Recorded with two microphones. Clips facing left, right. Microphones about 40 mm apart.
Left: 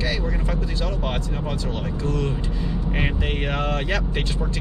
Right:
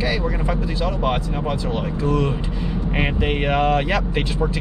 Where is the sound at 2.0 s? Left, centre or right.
Centre.